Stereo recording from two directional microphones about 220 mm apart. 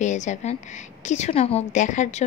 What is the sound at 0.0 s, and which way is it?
A woman's voice, 35° left (ahead or behind).